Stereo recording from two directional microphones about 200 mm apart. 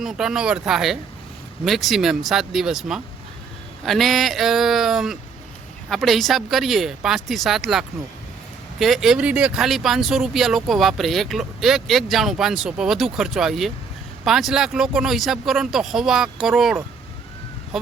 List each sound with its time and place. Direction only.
0.0 s speech: centre (ahead or behind)
8.8 s speech: centre (ahead or behind)